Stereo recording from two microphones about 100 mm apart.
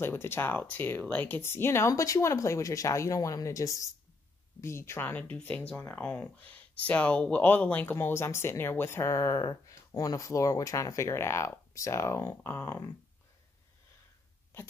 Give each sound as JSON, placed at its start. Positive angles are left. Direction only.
{"t": 0.0, "sound": "speech", "side_deg": 25}